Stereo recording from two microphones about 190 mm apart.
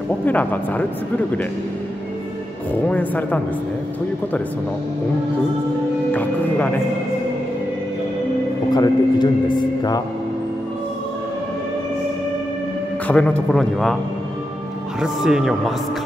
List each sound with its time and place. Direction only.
0.2 s speech: 10° left (ahead or behind)
2.9 s speech: 10° left (ahead or behind)
6.1 s speech: 10° left (ahead or behind)
8.7 s a man's voice: 20° left (ahead or behind)
13.0 s speech: 5° left (ahead or behind)
15.0 s speech: 5° right (ahead or behind)